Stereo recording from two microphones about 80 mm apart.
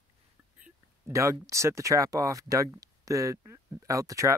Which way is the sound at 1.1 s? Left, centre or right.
Right.